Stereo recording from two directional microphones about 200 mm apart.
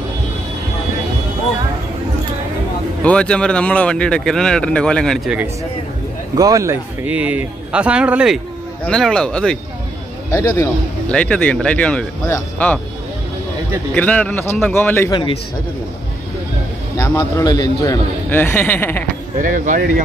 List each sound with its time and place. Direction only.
3.0 s speech: 5° left (ahead or behind)
6.3 s a man's voice: 15° right (ahead or behind); by 12.8 s 5° left (ahead or behind)
13.9 s a man's voice: 5° left (ahead or behind)
16.9 s a man's voice: 15° left (ahead or behind)
19.4 s speech: 40° right (ahead or behind)